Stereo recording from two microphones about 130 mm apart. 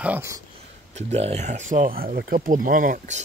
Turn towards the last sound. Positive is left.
turn(degrees=-80)